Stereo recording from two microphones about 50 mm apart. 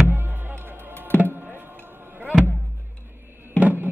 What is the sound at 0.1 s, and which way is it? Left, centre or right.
Music, right.